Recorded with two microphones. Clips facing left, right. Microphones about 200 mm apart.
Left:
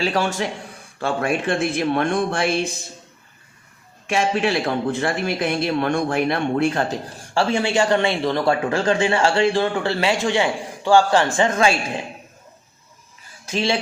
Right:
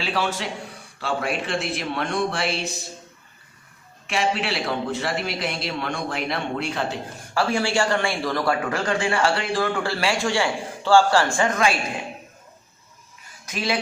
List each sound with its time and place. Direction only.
0.0 s speech: 45° left (ahead or behind)
4.5 s speech: 50° left (ahead or behind)
7.3 s speech: 25° left (ahead or behind)
13.4 s speech: 30° left (ahead or behind)